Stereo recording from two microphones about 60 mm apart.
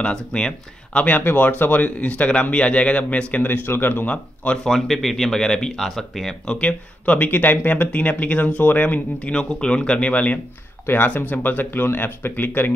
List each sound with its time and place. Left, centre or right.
0.0 s speech: centre
1.0 s speech: left
3.4 s speech: left
4.6 s speech: centre
6.6 s speech: left
9.3 s speech: centre; by 12.7 s left